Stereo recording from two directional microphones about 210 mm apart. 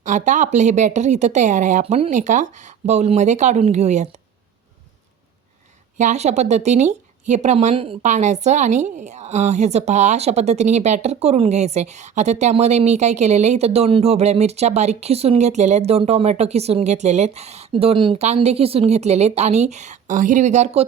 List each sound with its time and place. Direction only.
0.0 s speech: 35° right (ahead or behind)
6.0 s speech: 35° right (ahead or behind)